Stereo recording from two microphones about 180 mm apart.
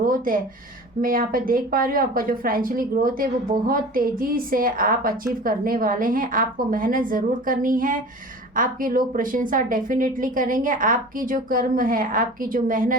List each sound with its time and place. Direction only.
0.0 s a woman's voice: 50° right (ahead or behind)